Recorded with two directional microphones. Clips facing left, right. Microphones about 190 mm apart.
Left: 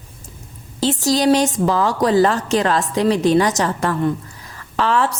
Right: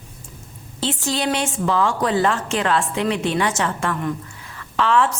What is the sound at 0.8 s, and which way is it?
A woman's voice, 40° left (ahead or behind).